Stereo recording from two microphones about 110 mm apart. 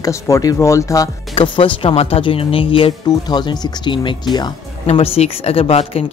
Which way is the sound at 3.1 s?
40° left (ahead or behind).